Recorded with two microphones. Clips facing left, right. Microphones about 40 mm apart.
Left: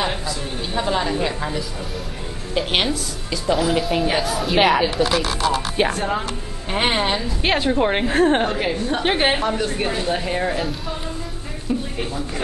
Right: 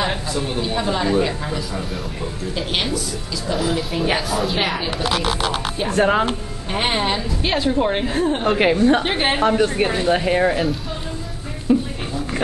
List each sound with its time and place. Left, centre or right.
0.6 s speech: centre
2.5 s a woman's voice: left
3.5 s speech: centre
5.2 s speech: right
6.7 s speech: centre
7.4 s a woman's voice: left
8.1 s a woman's voice: left
8.5 s a woman's voice: right
9.0 s speech: centre
9.4 s speech: centre
10.5 s speech: centre
11.7 s a sound: centre